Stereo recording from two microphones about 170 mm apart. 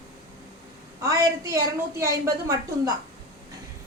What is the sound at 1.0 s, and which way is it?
A woman's voice, 20° right (ahead or behind).